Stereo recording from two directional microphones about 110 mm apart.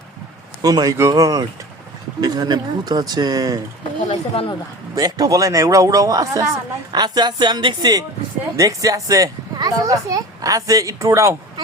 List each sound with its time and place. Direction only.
0.6 s speech: 35° right (ahead or behind)
4.1 s speech: 50° left (ahead or behind)
4.9 s speech: 35° right (ahead or behind)